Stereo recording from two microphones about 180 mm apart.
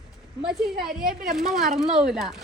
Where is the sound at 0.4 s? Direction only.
Centre (ahead or behind).